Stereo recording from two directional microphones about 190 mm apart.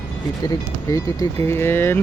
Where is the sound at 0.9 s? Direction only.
15° left (ahead or behind).